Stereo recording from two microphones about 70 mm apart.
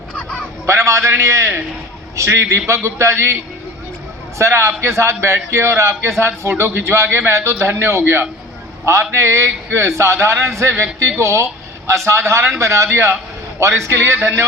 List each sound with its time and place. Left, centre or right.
0.7 s a man's voice: right
4.4 s a man's voice: right